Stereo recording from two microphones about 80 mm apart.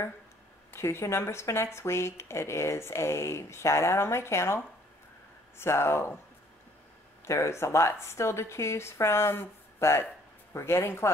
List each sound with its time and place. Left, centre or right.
0.7 s speech: left
5.6 s speech: left
7.2 s speech: left